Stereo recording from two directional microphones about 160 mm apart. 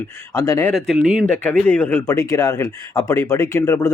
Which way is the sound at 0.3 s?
20° left (ahead or behind).